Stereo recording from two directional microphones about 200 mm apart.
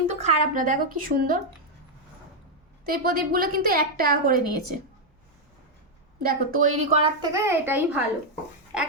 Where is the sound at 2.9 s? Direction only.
45° right (ahead or behind).